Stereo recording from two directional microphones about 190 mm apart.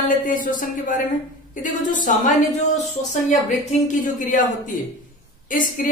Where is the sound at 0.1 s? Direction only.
45° left (ahead or behind).